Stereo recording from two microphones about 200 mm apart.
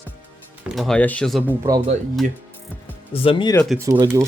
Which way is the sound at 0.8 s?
5° left (ahead or behind).